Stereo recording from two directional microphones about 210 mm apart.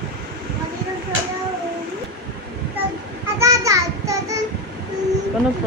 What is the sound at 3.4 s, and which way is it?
Child singing, 15° right (ahead or behind).